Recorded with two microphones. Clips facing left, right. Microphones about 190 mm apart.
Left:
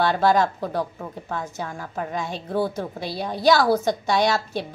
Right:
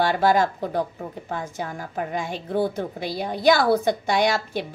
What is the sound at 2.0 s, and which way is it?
A woman's voice, 15° right (ahead or behind).